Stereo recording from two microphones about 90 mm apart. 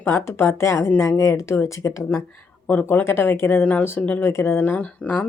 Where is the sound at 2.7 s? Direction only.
20° left (ahead or behind).